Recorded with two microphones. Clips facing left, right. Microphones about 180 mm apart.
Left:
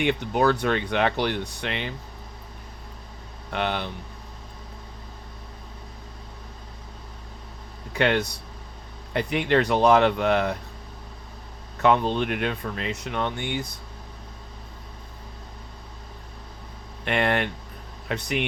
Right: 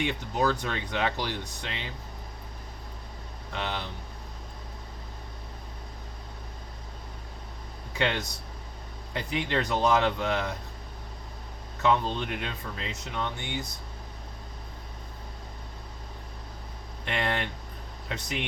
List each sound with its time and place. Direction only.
0.0 s speech: 60° left (ahead or behind)
3.5 s speech: 65° left (ahead or behind)
7.9 s speech: 60° left (ahead or behind)
11.8 s speech: 65° left (ahead or behind)
17.1 s speech: 60° left (ahead or behind)